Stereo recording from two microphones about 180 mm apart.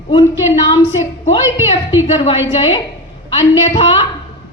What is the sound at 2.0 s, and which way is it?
A woman's voice, 35° left (ahead or behind).